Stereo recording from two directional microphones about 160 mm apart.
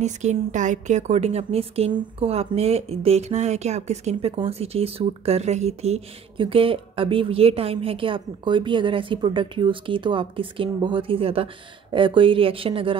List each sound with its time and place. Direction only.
0.0 s a woman's voice: 45° right (ahead or behind)